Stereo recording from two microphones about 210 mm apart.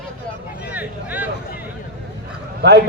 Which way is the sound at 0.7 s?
10° right (ahead or behind).